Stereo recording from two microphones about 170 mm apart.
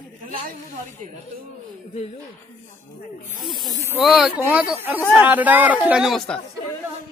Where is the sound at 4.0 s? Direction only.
Centre (ahead or behind).